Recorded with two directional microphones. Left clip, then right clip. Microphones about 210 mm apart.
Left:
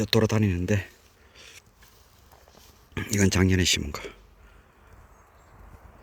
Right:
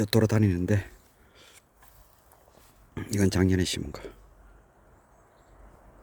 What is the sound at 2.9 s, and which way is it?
Speech, 5° right (ahead or behind).